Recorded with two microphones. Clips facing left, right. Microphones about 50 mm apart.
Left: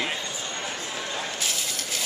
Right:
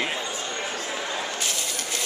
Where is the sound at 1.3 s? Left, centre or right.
Centre.